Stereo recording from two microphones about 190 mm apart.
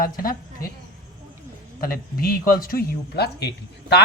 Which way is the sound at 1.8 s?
50° left (ahead or behind).